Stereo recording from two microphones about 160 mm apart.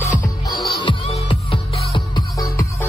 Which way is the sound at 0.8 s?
35° left (ahead or behind).